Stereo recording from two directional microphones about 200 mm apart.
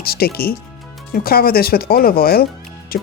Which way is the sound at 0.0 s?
50° left (ahead or behind).